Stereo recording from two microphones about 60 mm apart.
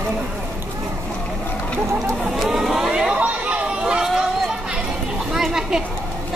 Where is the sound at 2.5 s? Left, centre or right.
Centre.